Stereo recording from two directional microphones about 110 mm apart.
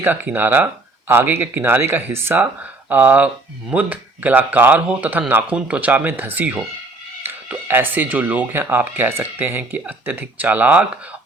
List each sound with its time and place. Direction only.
0.0 s speech: 15° right (ahead or behind)